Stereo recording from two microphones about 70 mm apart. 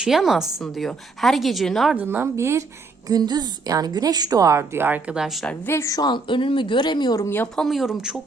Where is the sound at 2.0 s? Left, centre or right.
Right.